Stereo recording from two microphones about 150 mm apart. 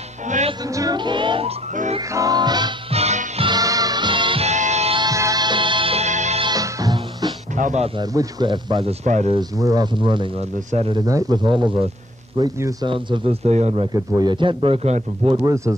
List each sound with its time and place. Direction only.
0.7 s music: 25° right (ahead or behind)
2.9 s music: 45° right (ahead or behind)
3.4 s music: 25° right (ahead or behind)
4.5 s music: 50° right (ahead or behind)
4.9 s music: 25° right (ahead or behind); by 6.4 s 50° right (ahead or behind)
6.4 s music: 25° right (ahead or behind)
7.5 s a sound: 55° right (ahead or behind)
8.0 s speech: 25° right (ahead or behind)
9.0 s speech: 50° right (ahead or behind)
9.3 s a man's voice: 25° right (ahead or behind); by 11.0 s 40° right (ahead or behind)
11.1 s a man's voice: 25° right (ahead or behind); by 13.8 s 45° right (ahead or behind)
13.9 s a man's voice: 25° right (ahead or behind); by 15.3 s 45° right (ahead or behind)
15.4 s speech: 20° right (ahead or behind)